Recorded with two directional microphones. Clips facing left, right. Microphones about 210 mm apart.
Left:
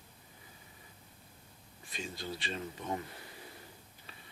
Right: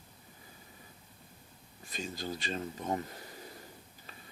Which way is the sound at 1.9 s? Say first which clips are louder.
Right 3 dB; 40° right (ahead or behind).